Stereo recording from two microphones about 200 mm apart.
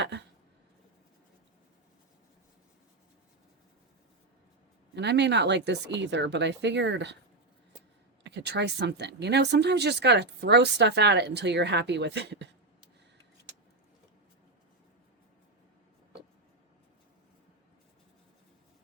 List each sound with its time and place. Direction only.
0.0 s a sound: 60° right (ahead or behind)
4.9 s speech: 60° right (ahead or behind)
8.2 s speech: 60° right (ahead or behind)